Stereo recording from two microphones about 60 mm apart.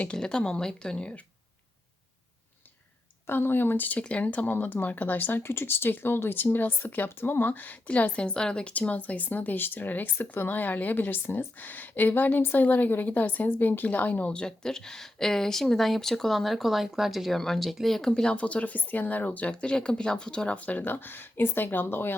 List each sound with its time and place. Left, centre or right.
0.0 s speech: centre
3.2 s speech: left; by 8.7 s centre
8.8 s a woman's voice: left
14.3 s speech: centre
18.1 s a woman's voice: centre
19.6 s speech: centre; by 22.1 s left